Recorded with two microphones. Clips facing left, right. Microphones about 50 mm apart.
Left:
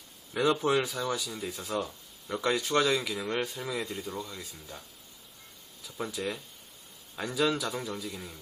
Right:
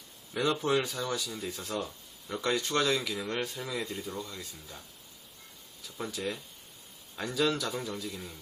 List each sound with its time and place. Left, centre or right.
0.3 s speech: centre
5.8 s speech: centre